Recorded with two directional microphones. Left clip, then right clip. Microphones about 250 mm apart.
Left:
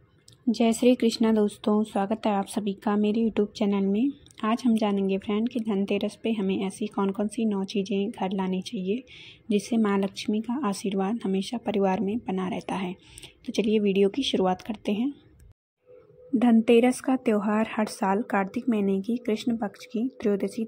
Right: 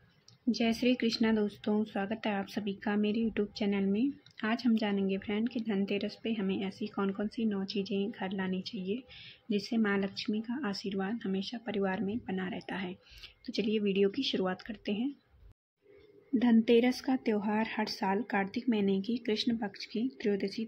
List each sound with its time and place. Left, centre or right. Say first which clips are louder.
0.5 s speech: left 8 dB; centre
16.3 s speech: left 6 dB; centre